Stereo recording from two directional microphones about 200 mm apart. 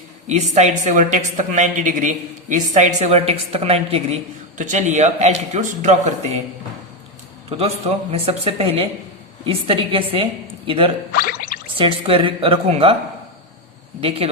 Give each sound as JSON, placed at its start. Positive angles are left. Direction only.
{"t": 0.3, "sound": "speech", "side_deg": -35}
{"t": 7.5, "sound": "a man's voice", "side_deg": -30}
{"t": 11.1, "sound": "a sound", "side_deg": 45}
{"t": 11.8, "sound": "a man's voice", "side_deg": -30}